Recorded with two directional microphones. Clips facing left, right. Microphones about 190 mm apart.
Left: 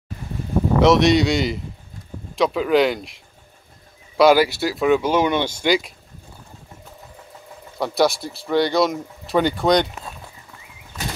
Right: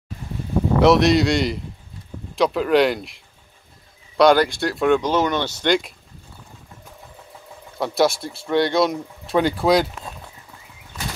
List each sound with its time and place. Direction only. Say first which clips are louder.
0.7 s speech: even; centre (ahead or behind)
4.2 s speech: left 1 dB; 5° left (ahead or behind)
7.7 s speech: even; centre (ahead or behind)